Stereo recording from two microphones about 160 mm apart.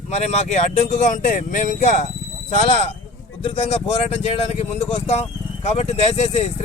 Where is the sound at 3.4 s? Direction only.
40° left (ahead or behind).